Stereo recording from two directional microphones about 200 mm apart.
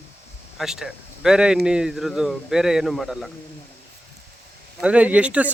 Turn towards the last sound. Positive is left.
turn(degrees=-5)  # may be behind; listen again after turning